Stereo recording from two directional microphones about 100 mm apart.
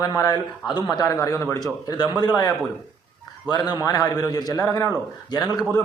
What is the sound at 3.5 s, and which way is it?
A man's voice, 45° left (ahead or behind).